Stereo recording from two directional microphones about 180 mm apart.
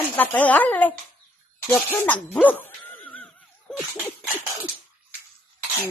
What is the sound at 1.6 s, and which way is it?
Dog, 10° left (ahead or behind).